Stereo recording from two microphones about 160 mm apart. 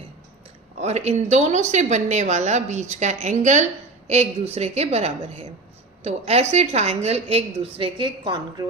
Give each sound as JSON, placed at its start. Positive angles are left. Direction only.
{"t": 0.8, "sound": "a woman's voice", "side_deg": -45}